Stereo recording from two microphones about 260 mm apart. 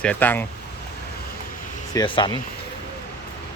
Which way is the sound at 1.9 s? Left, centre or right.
Centre.